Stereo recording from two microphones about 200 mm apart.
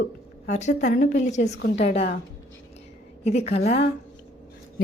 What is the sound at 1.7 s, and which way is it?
Speech, 30° left (ahead or behind).